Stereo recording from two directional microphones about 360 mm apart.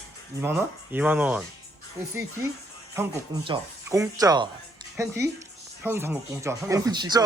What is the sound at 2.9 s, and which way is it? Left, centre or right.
Speech, centre.